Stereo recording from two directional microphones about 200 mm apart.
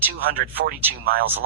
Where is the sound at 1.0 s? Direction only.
50° right (ahead or behind).